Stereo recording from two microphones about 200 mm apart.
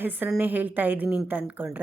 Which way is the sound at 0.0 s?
10° right (ahead or behind).